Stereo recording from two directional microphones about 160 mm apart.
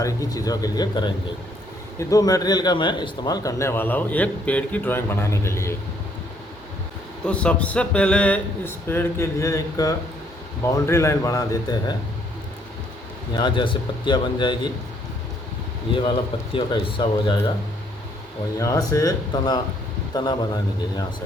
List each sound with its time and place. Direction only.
0.0 s speech: 20° left (ahead or behind)
7.3 s speech: 5° left (ahead or behind); by 11.9 s 25° left (ahead or behind)
13.3 s speech: 30° left (ahead or behind)
15.9 s a man's voice: 35° left (ahead or behind)
18.6 s speech: 20° left (ahead or behind)